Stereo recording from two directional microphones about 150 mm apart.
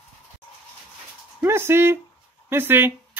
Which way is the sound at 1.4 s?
15° right (ahead or behind).